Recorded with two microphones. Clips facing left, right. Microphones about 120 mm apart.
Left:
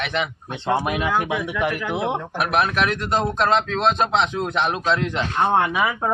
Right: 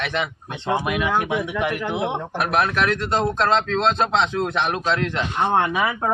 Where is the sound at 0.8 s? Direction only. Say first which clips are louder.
Even; 40° left (ahead or behind).